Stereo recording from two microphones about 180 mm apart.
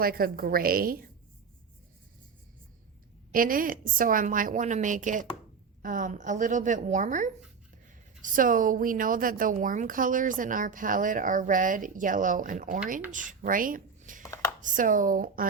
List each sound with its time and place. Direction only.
0.0 s a woman's voice: 55° right (ahead or behind)
3.3 s speech: 50° right (ahead or behind)
14.2 s a sound: 20° left (ahead or behind)
14.6 s speech: 45° right (ahead or behind)